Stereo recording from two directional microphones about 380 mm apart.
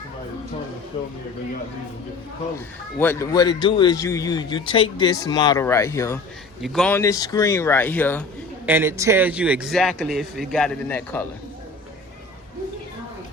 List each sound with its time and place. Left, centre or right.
0.9 s a man's voice: centre
3.0 s a man's voice: centre
8.6 s a man's voice: centre